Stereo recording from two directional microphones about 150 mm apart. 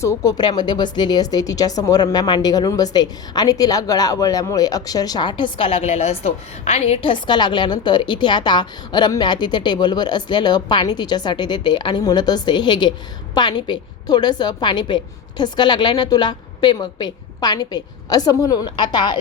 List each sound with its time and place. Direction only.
0.0 s speech: 20° left (ahead or behind)